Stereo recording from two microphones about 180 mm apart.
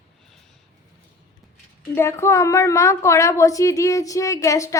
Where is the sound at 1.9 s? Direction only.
15° left (ahead or behind).